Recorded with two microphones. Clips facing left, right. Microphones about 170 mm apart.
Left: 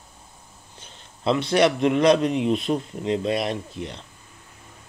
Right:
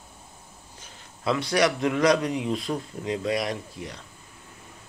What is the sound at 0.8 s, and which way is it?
A man's voice, 25° left (ahead or behind).